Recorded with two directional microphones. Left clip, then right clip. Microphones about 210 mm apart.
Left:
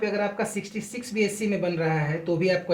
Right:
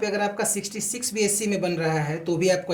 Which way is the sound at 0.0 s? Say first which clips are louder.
Right 1 dB; 30° right (ahead or behind).